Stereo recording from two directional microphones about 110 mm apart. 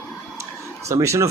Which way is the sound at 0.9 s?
25° right (ahead or behind).